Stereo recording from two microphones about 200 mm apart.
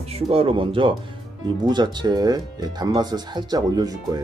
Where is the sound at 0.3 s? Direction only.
25° right (ahead or behind).